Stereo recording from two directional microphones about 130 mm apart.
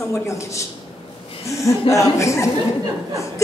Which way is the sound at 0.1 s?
25° left (ahead or behind).